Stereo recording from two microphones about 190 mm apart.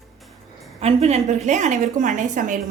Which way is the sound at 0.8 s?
35° right (ahead or behind).